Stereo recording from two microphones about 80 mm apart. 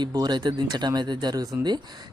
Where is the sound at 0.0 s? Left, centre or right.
Right.